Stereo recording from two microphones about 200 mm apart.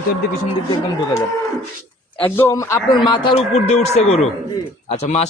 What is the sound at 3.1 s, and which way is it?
A man's voice, 25° left (ahead or behind).